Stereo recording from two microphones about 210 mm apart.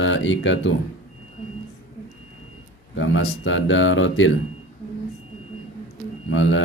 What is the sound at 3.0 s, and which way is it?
Speech, 65° left (ahead or behind).